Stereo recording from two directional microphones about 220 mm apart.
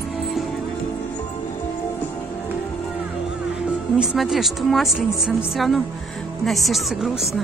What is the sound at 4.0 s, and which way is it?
Speech, centre (ahead or behind).